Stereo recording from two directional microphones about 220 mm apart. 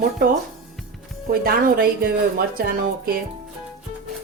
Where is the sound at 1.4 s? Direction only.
40° right (ahead or behind).